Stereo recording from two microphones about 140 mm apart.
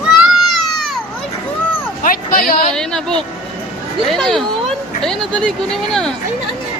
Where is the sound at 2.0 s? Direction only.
90° left.